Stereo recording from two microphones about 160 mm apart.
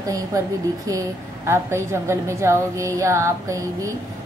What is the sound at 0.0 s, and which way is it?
A woman's voice, 20° right (ahead or behind).